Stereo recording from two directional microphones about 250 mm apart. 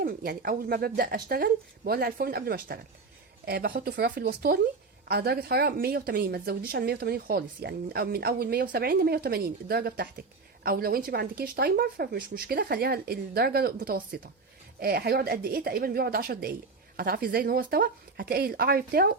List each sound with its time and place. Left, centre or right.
0.0 s a woman's voice: right